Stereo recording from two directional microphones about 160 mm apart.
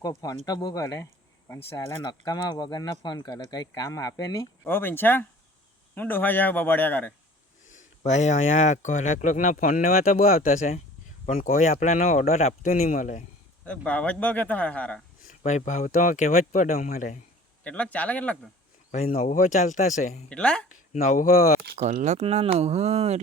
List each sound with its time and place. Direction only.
0.0 s speech: 25° left (ahead or behind)
7.7 s speech: 50° left (ahead or behind)
13.7 s speech: 5° left (ahead or behind)
15.3 s speech: 50° left (ahead or behind)
17.6 s speech: 10° left (ahead or behind)
19.0 s speech: 50° left (ahead or behind)
20.3 s speech: 5° left (ahead or behind)
20.7 s speech: 50° left (ahead or behind)
22.0 s speech: 45° right (ahead or behind)